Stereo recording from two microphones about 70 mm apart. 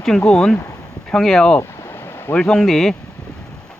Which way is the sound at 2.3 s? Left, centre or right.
Centre.